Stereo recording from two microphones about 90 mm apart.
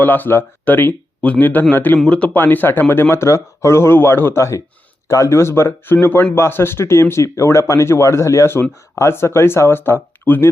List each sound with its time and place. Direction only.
0.0 s speech: 20° left (ahead or behind)